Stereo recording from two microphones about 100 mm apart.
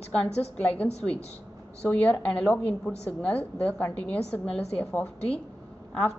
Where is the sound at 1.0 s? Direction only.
Centre (ahead or behind).